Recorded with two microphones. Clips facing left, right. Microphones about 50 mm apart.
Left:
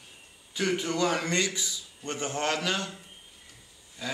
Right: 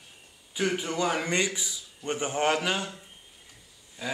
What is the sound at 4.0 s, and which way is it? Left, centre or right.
Speech, centre.